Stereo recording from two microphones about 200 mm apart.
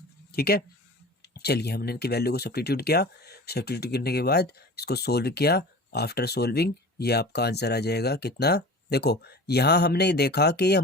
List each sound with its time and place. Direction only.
0.3 s speech: 50° left (ahead or behind)